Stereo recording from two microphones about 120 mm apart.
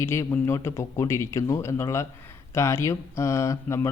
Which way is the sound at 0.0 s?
20° left (ahead or behind).